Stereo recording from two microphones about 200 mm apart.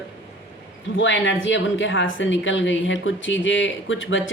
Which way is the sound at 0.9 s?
70° left (ahead or behind).